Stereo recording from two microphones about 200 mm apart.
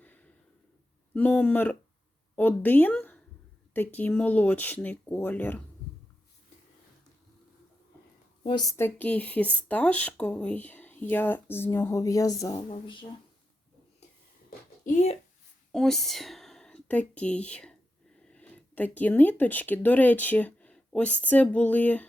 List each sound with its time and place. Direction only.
0.0 s a sound: 5° left (ahead or behind)
1.1 s speech: 5° left (ahead or behind)
8.4 s speech: 15° left (ahead or behind)
12.5 s a woman's voice: 30° left (ahead or behind)
14.8 s speech: 35° left (ahead or behind)
15.7 s speech: centre (ahead or behind)